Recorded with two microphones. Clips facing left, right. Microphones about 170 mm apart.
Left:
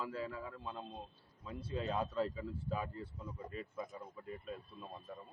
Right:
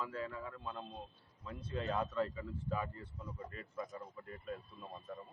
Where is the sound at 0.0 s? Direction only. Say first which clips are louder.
Even; 5° left (ahead or behind).